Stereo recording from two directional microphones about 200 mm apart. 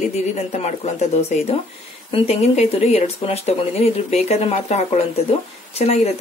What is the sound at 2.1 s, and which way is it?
Speech, 30° left (ahead or behind).